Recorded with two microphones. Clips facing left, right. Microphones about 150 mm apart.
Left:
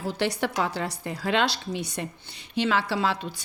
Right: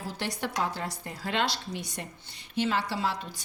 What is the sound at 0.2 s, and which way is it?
A woman's voice, 75° left (ahead or behind).